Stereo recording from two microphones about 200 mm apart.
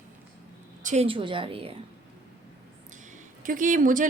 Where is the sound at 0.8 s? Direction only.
35° right (ahead or behind).